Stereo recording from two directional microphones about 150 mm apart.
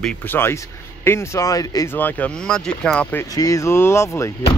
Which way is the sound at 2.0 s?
10° left (ahead or behind).